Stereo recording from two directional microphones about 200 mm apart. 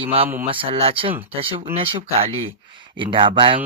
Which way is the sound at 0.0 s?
30° right (ahead or behind).